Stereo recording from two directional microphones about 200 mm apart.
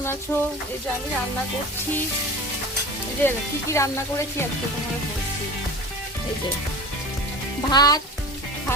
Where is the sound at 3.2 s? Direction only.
15° left (ahead or behind).